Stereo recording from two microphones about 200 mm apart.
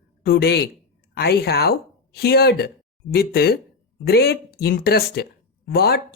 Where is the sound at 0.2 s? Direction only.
50° left (ahead or behind).